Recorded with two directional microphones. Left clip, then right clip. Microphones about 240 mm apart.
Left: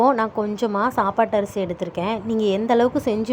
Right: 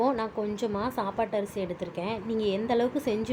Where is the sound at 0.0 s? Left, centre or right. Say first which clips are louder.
Left 9 dB; centre.